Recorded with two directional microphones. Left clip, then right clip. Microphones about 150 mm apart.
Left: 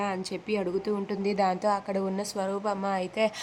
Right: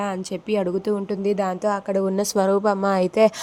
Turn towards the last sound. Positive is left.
turn(degrees=-45)  # may be behind; listen again after turning